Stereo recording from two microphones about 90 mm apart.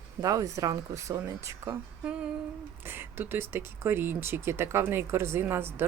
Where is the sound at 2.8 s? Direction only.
25° right (ahead or behind).